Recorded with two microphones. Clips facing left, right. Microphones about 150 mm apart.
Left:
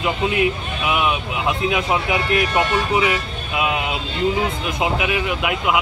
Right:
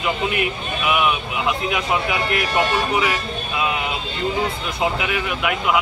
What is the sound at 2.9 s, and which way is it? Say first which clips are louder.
Vehicle: left 2 dB; 20° left (ahead or behind).